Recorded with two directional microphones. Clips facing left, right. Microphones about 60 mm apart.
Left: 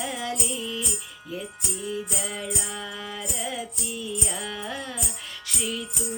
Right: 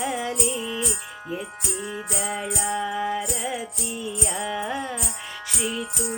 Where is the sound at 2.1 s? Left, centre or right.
Right.